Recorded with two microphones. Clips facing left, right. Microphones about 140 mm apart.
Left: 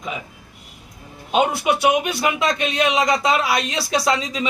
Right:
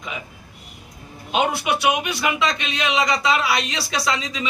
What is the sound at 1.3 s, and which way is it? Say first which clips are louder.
A man's voice: left 3 dB; 40° left (ahead or behind).